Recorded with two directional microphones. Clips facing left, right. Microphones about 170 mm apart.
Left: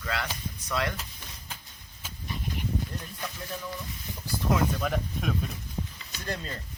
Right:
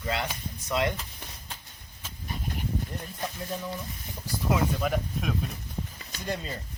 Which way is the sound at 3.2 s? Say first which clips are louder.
Right 5 dB; 25° right (ahead or behind).